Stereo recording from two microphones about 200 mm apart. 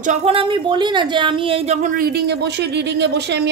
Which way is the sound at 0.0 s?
35° right (ahead or behind).